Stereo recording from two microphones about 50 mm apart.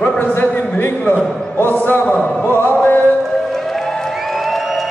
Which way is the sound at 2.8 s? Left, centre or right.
Left.